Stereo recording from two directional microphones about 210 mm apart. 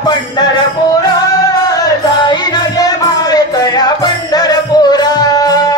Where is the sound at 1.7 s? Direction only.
20° left (ahead or behind).